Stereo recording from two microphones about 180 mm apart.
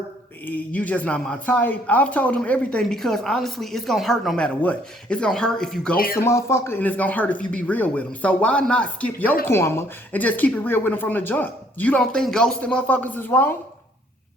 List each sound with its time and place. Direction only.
0.4 s speech: 10° left (ahead or behind)
6.0 s speech: 55° left (ahead or behind)
6.2 s speech: 15° left (ahead or behind)